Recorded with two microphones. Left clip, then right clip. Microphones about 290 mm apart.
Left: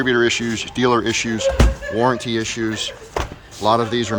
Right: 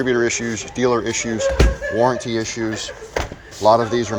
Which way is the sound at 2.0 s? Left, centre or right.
Left.